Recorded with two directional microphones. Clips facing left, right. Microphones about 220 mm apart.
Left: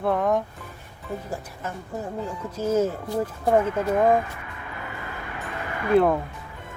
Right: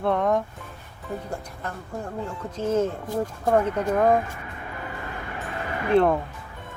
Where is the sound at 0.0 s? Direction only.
Centre (ahead or behind).